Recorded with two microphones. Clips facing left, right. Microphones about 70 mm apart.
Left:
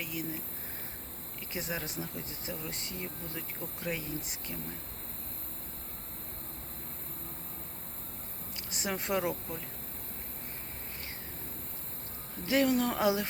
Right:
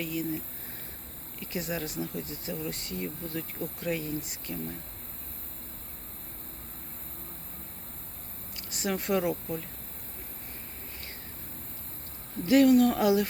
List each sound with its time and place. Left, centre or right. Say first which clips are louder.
0.0 s speech: right 6 dB; centre
1.5 s speech: right 4 dB; left
8.7 s speech: right 4 dB; left
12.5 s speech: right 7 dB; left